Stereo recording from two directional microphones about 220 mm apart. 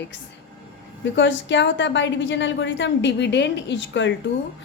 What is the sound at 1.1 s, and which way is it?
A woman's voice, 55° left (ahead or behind).